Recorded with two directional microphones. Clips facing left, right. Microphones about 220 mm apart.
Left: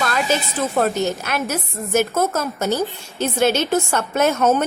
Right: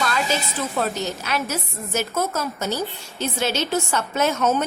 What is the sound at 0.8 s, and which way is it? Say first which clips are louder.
A woman's voice: left 6 dB; 50° left (ahead or behind).